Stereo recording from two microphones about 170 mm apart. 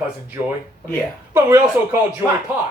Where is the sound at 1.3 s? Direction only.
10° right (ahead or behind).